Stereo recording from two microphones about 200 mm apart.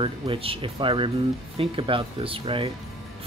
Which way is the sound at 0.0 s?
25° right (ahead or behind).